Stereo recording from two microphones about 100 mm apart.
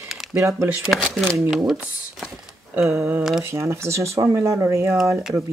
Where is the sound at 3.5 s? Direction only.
25° right (ahead or behind).